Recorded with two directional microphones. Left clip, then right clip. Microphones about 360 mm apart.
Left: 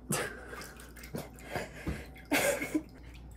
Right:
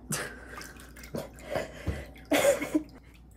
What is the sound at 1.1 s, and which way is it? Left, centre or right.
Cough, centre.